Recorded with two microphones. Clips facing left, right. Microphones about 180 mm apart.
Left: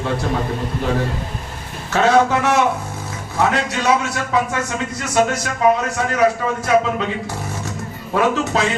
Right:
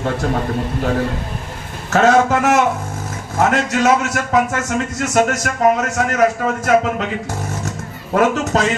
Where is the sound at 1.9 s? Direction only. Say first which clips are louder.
Right 2 dB; 45° right (ahead or behind).